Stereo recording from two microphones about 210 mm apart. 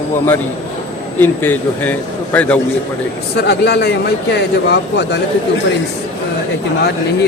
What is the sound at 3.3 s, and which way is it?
A man's voice, 50° left (ahead or behind).